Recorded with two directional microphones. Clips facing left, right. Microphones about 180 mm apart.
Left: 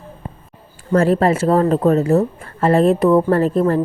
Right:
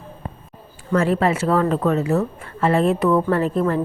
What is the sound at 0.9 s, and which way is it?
A woman's voice, 40° left (ahead or behind).